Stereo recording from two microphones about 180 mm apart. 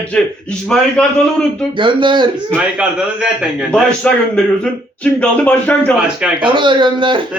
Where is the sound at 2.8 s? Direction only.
5° right (ahead or behind).